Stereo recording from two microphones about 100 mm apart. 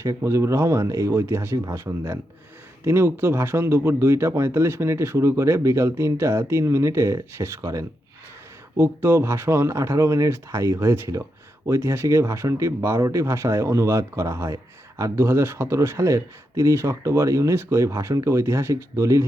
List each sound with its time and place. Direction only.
0.0 s speech: 30° right (ahead or behind)